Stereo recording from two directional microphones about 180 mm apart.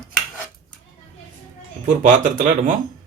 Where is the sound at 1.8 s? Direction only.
45° right (ahead or behind).